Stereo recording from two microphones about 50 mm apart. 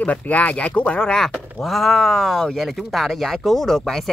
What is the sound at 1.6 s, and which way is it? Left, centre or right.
Speech, centre.